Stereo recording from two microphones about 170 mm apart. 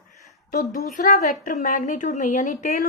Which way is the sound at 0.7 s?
50° left (ahead or behind).